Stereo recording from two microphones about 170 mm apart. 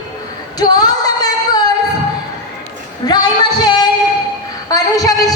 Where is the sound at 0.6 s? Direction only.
25° left (ahead or behind).